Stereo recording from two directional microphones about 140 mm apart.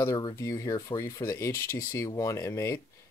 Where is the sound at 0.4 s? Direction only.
20° left (ahead or behind).